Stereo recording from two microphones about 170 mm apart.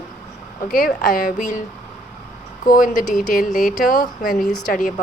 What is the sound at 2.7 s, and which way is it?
Speech, 55° left (ahead or behind).